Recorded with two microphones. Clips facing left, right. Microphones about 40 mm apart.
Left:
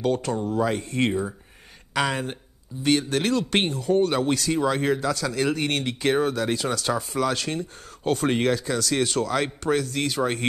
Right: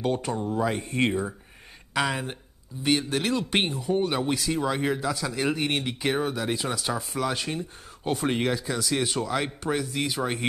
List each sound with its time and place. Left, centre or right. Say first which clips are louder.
0.0 s speech: left 3 dB; centre
2.0 s speech: left 2 dB; centre
3.7 s speech: left 4 dB; centre
6.9 s speech: left 4 dB; centre
7.2 s speech: left 3 dB; centre